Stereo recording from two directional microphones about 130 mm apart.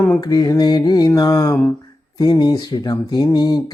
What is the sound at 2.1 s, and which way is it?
Speech, 30° left (ahead or behind).